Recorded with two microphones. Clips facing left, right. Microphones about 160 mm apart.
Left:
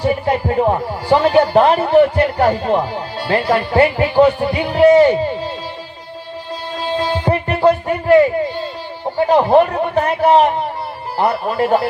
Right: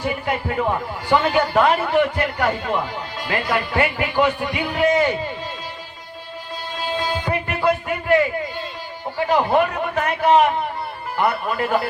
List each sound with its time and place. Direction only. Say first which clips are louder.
0.0 s a man's voice: left 7 dB; 30° left (ahead or behind)
6.8 s music: left 6 dB; 35° left (ahead or behind)
9.1 s a man's voice: left 6 dB; 35° left (ahead or behind)